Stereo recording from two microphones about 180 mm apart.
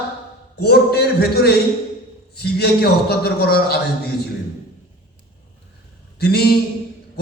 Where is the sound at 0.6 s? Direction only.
65° left (ahead or behind).